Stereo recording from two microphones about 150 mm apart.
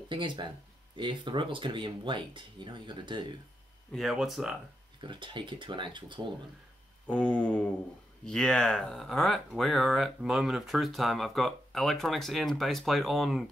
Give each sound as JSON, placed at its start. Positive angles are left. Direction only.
{"t": 0.1, "sound": "speech", "side_deg": -35}
{"t": 3.9, "sound": "speech", "side_deg": 0}
{"t": 5.0, "sound": "speech", "side_deg": -30}
{"t": 7.1, "sound": "a sound", "side_deg": 5}
{"t": 8.3, "sound": "speech", "side_deg": 5}